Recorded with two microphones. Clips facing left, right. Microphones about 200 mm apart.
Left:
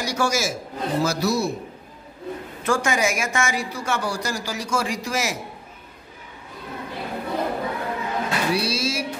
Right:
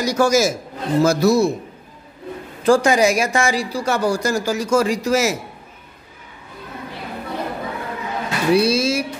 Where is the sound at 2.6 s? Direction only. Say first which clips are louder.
Right 8 dB; 35° right (ahead or behind).